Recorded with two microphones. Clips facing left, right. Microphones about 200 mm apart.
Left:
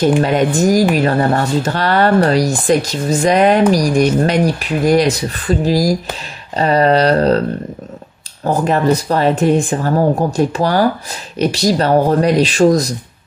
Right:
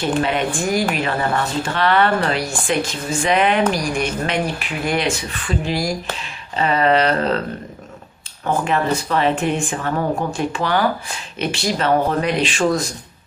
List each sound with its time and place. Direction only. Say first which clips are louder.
0.0 s speech: left 7 dB; 40° left (ahead or behind)
8.5 s speech: left 5 dB; 40° left (ahead or behind)